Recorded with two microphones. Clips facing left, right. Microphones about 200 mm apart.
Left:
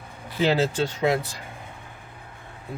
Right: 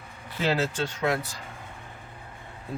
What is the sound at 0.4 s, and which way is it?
Speech, 30° left (ahead or behind).